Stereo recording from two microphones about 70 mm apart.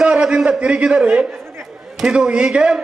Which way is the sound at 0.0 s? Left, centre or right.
Centre.